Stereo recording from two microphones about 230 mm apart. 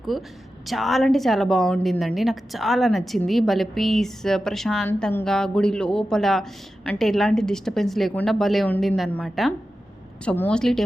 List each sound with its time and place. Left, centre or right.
0.1 s a woman's voice: centre